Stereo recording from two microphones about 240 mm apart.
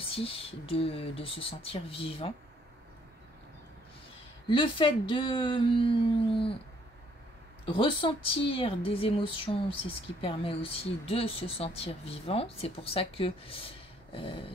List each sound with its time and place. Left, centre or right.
0.0 s speech: left
4.5 s speech: left
7.6 s speech: left